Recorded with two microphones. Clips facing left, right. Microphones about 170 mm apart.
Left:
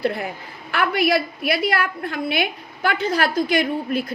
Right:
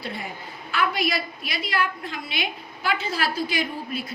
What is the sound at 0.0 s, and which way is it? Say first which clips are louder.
A woman's voice: left 9 dB; 65° left (ahead or behind).